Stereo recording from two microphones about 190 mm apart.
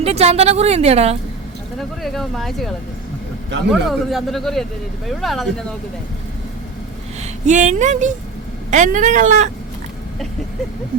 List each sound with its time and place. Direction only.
0.0 s a woman's voice: 35° right (ahead or behind)
2.0 s speech: centre (ahead or behind)
3.7 s speech: centre (ahead or behind)
7.2 s a woman's voice: 40° right (ahead or behind)